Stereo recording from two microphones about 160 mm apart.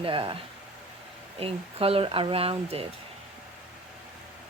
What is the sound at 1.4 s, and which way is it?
Speech, 35° right (ahead or behind).